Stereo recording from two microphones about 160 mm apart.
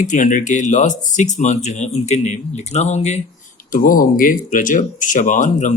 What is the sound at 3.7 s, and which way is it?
Speech, 60° left (ahead or behind).